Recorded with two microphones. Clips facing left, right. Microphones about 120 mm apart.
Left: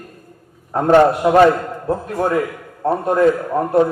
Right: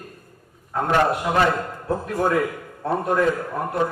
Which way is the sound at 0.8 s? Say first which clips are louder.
Left 9 dB; 35° left (ahead or behind).